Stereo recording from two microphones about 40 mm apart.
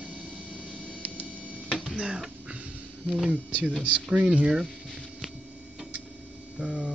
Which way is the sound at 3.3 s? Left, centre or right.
Right.